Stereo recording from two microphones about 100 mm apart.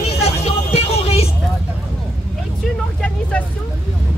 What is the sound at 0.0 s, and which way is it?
Music, 90° left.